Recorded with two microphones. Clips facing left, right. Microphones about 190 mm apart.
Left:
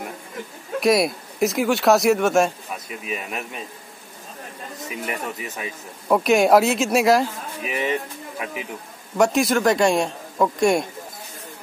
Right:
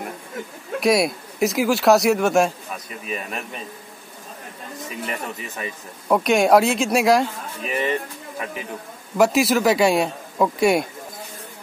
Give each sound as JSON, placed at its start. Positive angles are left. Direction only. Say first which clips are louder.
{"t": 0.7, "sound": "speech", "louder": "even", "side_deg": 0}
{"t": 5.0, "sound": "speech", "louder": "left 1 dB", "side_deg": 5}
{"t": 9.1, "sound": "speech", "louder": "right 1 dB", "side_deg": -5}